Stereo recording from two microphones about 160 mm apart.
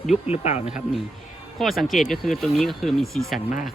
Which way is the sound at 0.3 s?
45° left (ahead or behind).